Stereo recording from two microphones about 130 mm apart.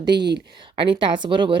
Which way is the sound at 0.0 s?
35° right (ahead or behind).